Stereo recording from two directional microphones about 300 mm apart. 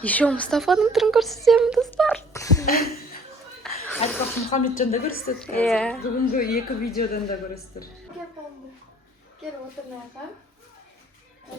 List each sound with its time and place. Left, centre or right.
0.0 s speech: centre
2.6 s a woman's voice: left
3.6 s chuckle: centre
4.4 s a woman's voice: left
5.5 s speech: centre
6.3 s a woman's voice: left